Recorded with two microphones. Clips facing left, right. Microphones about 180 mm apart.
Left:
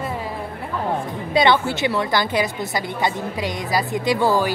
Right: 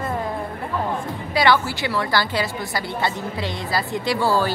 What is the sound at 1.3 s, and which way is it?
A woman's voice, 20° left (ahead or behind).